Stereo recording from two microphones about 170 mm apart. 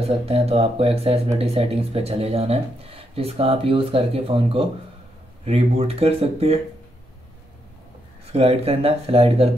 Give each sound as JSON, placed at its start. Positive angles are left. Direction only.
{"t": 0.0, "sound": "speech", "side_deg": -35}
{"t": 8.3, "sound": "speech", "side_deg": -35}